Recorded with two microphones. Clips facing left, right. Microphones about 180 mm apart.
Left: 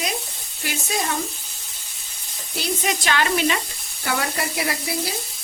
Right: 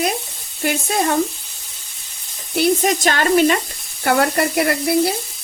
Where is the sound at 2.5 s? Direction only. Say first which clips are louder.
Right 9 dB; 55° right (ahead or behind).